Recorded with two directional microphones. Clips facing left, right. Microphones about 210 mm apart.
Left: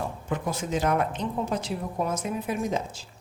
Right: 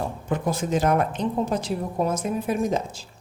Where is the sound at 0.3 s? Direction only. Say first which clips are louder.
Right 5 dB; 45° right (ahead or behind).